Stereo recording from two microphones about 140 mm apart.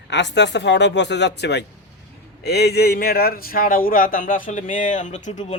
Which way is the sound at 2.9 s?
90° left.